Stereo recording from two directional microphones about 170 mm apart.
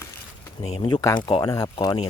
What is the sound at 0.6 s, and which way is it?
Speech, 40° left (ahead or behind).